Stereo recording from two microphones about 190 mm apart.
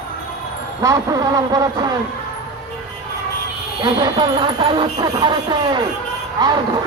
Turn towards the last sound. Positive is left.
turn(degrees=-20)  # may be behind; listen again after turning